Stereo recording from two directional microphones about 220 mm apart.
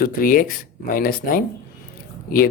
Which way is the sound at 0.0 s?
40° left (ahead or behind).